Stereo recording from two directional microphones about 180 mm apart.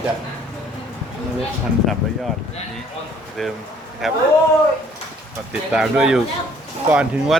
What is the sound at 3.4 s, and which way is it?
Speech, centre (ahead or behind).